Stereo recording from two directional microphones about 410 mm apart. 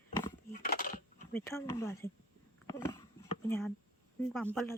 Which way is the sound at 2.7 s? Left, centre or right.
Centre.